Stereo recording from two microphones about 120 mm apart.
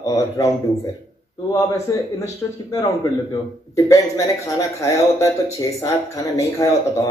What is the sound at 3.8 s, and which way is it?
A man's voice, 25° left (ahead or behind).